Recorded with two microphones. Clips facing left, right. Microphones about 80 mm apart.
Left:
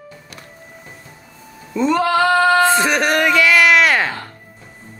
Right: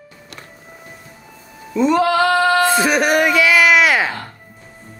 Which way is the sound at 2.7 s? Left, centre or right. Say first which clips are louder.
Right 1 dB; centre.